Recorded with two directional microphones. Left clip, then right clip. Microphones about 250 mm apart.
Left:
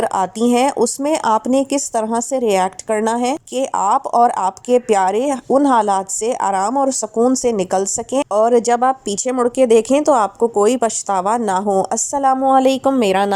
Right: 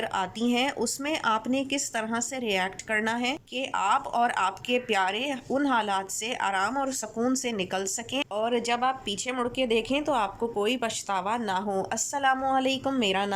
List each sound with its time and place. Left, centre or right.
0.0 s speech: left